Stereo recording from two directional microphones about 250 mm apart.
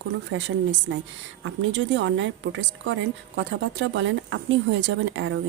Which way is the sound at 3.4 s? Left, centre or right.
Right.